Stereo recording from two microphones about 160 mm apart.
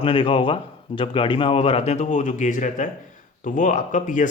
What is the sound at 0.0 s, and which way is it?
A man's voice, 35° left (ahead or behind).